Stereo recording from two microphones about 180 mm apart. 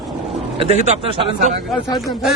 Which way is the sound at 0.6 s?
35° right (ahead or behind).